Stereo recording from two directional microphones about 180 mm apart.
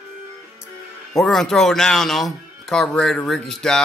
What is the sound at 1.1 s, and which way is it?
Speech, centre (ahead or behind).